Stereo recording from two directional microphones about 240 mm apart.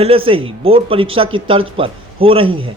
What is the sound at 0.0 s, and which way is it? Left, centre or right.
Speech, right.